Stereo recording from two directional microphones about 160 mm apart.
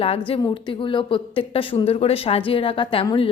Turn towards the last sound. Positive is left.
turn(degrees=35)  # may be behind; listen again after turning